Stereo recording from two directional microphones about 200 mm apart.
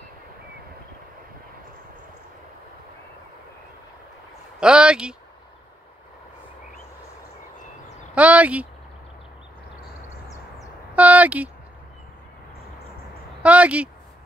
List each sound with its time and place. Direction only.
4.6 s speech: 5° right (ahead or behind)
8.1 s speech: 5° right (ahead or behind)
11.0 s speech: 5° right (ahead or behind)
13.4 s speech: 5° right (ahead or behind)